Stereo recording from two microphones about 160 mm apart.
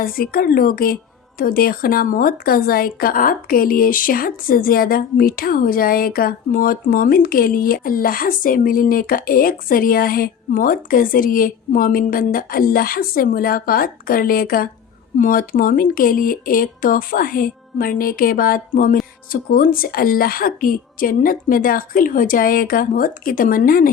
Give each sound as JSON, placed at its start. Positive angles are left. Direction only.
{"t": 0.0, "sound": "speech", "side_deg": 65}